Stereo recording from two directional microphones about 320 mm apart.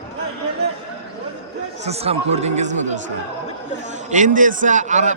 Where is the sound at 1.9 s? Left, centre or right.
Centre.